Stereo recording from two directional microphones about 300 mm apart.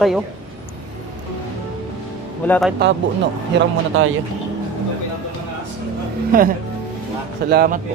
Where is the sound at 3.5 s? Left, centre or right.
Right.